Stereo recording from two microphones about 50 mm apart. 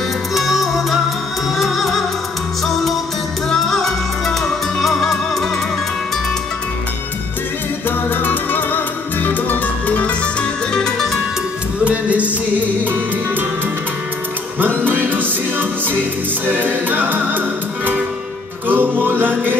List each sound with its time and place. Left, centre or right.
0.3 s music: centre
3.5 s music: centre
8.1 s music: left
10.7 s music: centre
11.8 s music: right
14.9 s music: right
16.4 s music: right
18.7 s music: right